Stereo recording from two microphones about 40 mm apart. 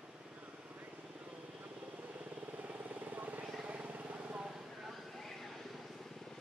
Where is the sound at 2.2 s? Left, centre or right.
Right.